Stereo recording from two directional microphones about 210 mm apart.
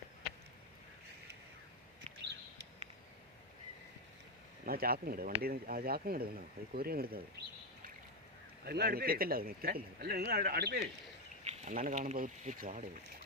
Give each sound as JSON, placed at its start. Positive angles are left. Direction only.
{"t": 4.6, "sound": "speech", "side_deg": -45}
{"t": 8.6, "sound": "speech", "side_deg": -50}
{"t": 11.4, "sound": "speech", "side_deg": -35}